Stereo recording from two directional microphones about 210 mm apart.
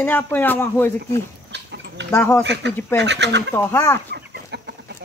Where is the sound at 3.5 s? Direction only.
10° left (ahead or behind).